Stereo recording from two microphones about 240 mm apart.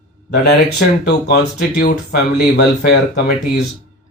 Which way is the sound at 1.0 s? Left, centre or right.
Left.